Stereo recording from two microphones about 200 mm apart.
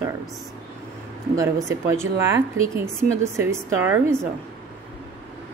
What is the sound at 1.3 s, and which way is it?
Speech, 15° right (ahead or behind).